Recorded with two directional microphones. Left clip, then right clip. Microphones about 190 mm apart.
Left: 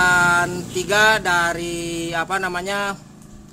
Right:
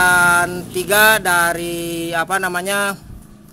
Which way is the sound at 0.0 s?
15° right (ahead or behind).